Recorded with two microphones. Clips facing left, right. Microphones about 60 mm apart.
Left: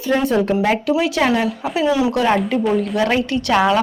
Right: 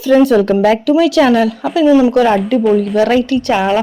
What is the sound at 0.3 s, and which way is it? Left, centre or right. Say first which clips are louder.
Speech: right 6 dB; right.